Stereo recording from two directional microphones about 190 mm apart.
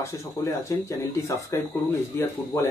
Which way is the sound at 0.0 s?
15° left (ahead or behind).